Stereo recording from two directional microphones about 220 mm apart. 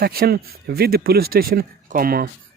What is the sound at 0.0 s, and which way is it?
Speech, 45° right (ahead or behind).